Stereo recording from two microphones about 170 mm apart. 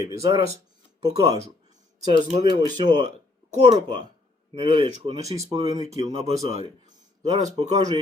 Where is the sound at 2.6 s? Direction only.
25° right (ahead or behind).